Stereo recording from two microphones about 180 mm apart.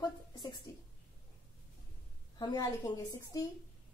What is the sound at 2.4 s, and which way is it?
A woman's voice, 20° left (ahead or behind).